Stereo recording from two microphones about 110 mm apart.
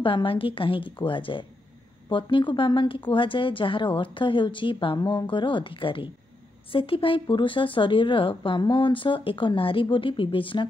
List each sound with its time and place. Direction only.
0.0 s a woman's voice: 50° left (ahead or behind)